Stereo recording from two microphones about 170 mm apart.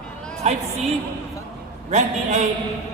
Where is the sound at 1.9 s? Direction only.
45° right (ahead or behind).